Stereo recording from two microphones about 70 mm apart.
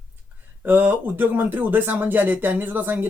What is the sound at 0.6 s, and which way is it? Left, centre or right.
Speech, right.